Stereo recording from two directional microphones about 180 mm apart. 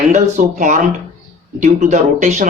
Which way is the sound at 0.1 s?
40° right (ahead or behind).